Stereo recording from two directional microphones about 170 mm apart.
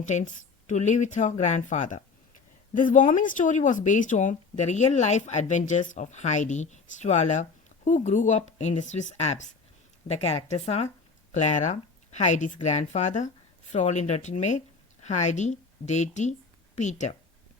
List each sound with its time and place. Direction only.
0.0 s speech: 45° left (ahead or behind)